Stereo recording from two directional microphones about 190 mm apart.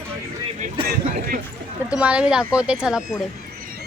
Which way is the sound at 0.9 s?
50° right (ahead or behind).